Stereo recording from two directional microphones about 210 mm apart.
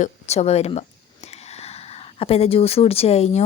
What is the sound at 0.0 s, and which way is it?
A woman's voice, 30° left (ahead or behind).